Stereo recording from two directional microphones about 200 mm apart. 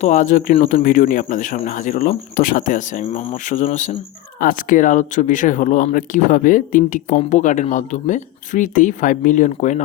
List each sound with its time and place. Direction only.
0.0 s speech: 40° left (ahead or behind)